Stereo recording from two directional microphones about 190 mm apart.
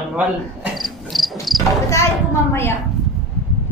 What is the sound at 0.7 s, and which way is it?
Cricket, centre (ahead or behind).